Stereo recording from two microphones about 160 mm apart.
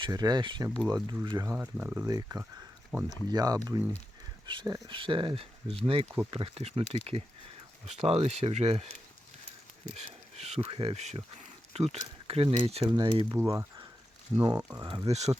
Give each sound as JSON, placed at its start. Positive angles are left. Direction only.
{"t": 0.0, "sound": "speech", "side_deg": -25}
{"t": 1.5, "sound": "speech", "side_deg": -15}
{"t": 2.0, "sound": "speech", "side_deg": -25}
{"t": 2.9, "sound": "speech", "side_deg": 0}
{"t": 3.2, "sound": "speech", "side_deg": -25}
{"t": 13.3, "sound": "speech", "side_deg": -15}
{"t": 14.8, "sound": "speech", "side_deg": -25}